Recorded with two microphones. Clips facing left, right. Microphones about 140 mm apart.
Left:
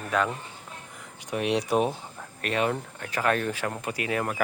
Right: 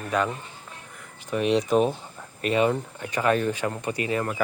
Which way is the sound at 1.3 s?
10° left (ahead or behind).